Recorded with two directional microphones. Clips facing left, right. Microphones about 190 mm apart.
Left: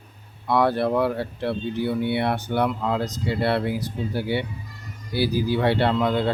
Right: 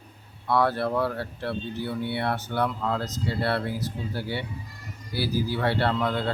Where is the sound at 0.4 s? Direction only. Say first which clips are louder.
Left 3 dB; 15° left (ahead or behind).